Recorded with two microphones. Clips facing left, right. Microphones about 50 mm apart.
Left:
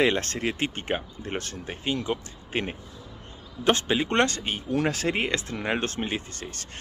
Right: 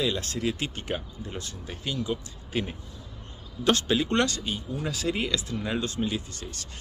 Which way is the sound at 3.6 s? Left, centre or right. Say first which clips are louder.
Left 1 dB; left.